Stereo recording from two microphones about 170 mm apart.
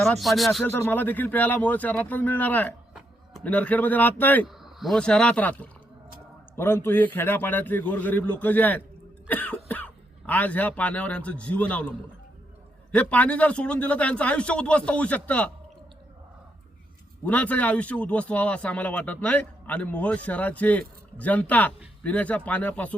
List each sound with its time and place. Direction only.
0.0 s speech: centre (ahead or behind)
0.6 s speech: 10° left (ahead or behind)
4.4 s a man's voice: centre (ahead or behind)
17.2 s speech: 10° left (ahead or behind)